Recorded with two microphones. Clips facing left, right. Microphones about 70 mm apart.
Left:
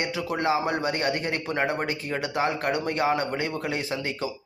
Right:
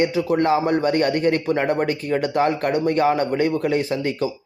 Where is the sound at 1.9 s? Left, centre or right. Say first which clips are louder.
Right 7 dB; right.